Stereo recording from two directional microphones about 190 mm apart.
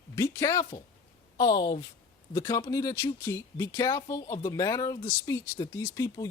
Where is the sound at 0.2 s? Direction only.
15° left (ahead or behind).